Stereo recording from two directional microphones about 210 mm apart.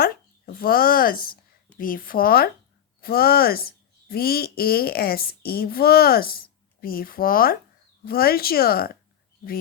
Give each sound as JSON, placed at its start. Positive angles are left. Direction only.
{"t": 0.0, "sound": "a woman's voice", "side_deg": 45}